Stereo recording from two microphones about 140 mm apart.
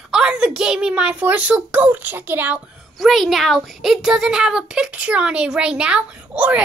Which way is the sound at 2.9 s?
Centre (ahead or behind).